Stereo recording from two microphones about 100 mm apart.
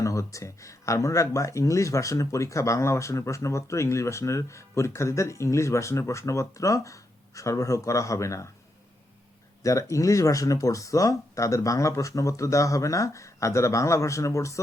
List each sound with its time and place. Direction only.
0.0 s speech: 30° left (ahead or behind)
9.6 s speech: 30° left (ahead or behind)